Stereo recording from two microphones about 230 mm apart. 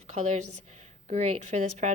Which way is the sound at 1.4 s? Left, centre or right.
Right.